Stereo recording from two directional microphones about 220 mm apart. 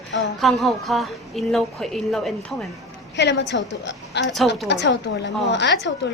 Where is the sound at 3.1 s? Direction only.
50° left (ahead or behind).